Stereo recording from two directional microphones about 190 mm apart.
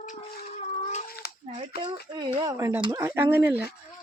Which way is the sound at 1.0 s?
55° left (ahead or behind).